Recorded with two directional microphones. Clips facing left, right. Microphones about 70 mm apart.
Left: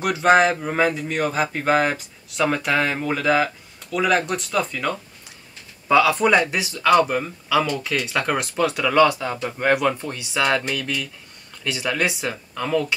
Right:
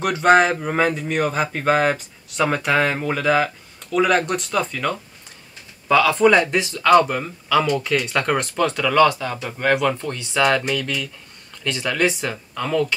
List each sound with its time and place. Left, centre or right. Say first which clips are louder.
0.0 s speech: right 1 dB; centre
5.9 s speech: right 2 dB; centre
10.0 s speech: right 3 dB; centre